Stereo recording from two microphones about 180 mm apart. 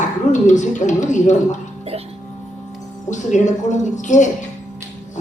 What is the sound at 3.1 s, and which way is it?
Speech, 40° left (ahead or behind).